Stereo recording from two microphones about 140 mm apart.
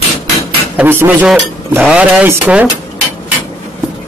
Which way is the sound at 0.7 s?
15° right (ahead or behind).